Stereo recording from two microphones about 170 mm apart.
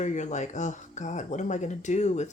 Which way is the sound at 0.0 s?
45° left (ahead or behind).